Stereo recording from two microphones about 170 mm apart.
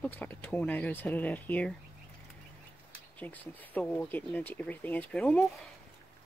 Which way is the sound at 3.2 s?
10° left (ahead or behind).